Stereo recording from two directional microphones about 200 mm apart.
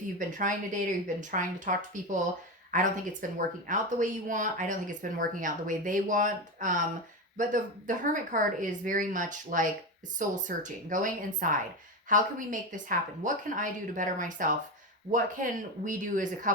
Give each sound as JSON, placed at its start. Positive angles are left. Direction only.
{"t": 0.2, "sound": "speech", "side_deg": -40}